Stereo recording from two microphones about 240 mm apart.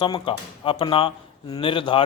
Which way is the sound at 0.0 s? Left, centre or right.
Left.